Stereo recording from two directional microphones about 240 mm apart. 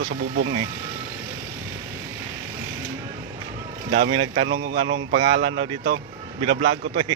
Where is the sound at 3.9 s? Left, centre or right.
Right.